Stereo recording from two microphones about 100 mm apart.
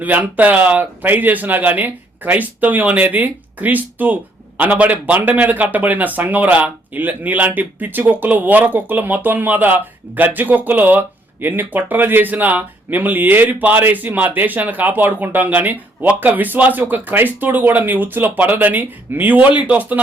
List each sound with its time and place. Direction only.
0.0 s speech: 15° right (ahead or behind)